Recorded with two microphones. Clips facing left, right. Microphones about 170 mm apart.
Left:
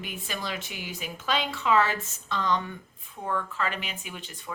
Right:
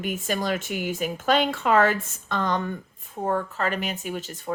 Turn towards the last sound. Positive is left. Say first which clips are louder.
# right 10 dB
turn(degrees=-40)  # may be behind; listen again after turning